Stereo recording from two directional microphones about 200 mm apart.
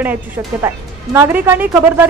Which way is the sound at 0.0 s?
10° right (ahead or behind).